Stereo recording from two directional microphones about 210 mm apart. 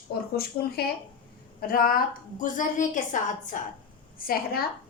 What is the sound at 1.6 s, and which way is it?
A woman's voice, 45° left (ahead or behind).